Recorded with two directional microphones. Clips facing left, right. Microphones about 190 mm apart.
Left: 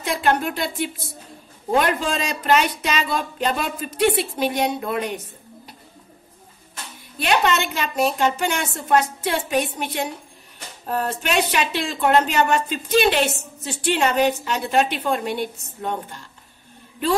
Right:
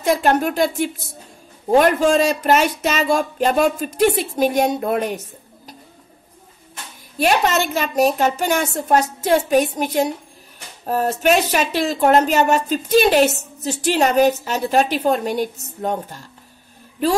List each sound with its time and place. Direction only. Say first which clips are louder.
0.0 s speech: right 4 dB; 45° right (ahead or behind)
7.2 s speech: right 3 dB; 40° right (ahead or behind)